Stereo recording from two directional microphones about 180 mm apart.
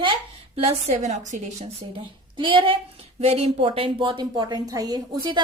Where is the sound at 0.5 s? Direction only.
35° right (ahead or behind).